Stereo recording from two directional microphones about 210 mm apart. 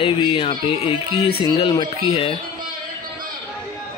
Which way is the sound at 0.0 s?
25° left (ahead or behind).